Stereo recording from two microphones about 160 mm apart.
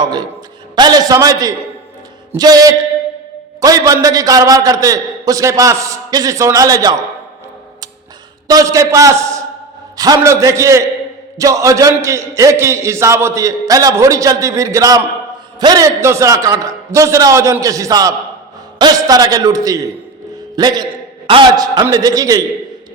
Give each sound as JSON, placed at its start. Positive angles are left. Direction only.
{"t": 0.0, "sound": "a man's voice", "side_deg": -25}
{"t": 8.4, "sound": "a man's voice", "side_deg": -20}